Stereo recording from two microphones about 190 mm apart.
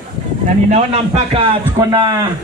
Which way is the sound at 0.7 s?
35° right (ahead or behind).